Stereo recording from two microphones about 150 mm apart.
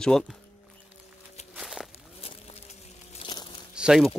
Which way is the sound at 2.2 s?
40° left (ahead or behind).